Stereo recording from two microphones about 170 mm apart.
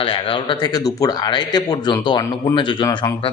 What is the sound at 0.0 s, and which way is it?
Speech, 30° left (ahead or behind).